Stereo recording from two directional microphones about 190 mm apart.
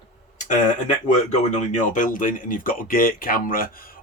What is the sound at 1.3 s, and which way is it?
Speech, 40° left (ahead or behind).